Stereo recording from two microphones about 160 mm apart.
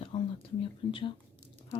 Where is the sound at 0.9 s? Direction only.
35° left (ahead or behind).